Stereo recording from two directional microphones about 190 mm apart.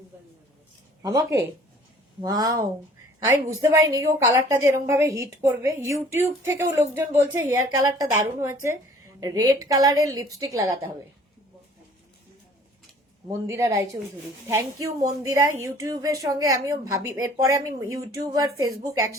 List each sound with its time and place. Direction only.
1.0 s a woman's voice: 15° right (ahead or behind)
13.5 s a woman's voice: 15° right (ahead or behind)